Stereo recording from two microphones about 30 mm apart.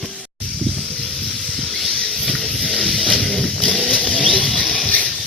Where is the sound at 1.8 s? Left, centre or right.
Centre.